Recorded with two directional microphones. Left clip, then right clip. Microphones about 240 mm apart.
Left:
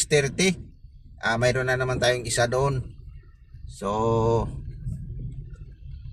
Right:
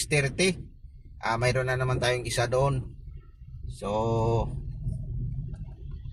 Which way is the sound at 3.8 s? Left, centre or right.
Left.